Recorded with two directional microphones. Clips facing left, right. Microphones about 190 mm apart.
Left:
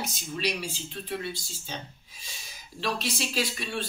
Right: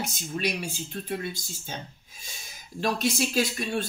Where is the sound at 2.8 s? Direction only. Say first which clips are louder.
Right 5 dB; 45° right (ahead or behind).